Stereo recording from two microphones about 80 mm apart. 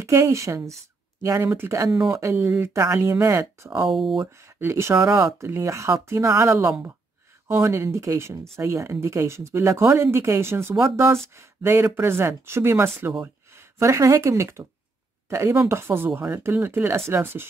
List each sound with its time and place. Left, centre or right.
0.0 s speech: right
2.3 s speech: right
2.7 s speech: right
3.8 s speech: centre
4.6 s speech: right
4.9 s speech: right
5.4 s speech: right